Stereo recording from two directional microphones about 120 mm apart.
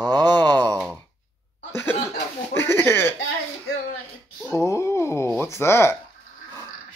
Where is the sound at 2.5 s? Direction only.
20° left (ahead or behind).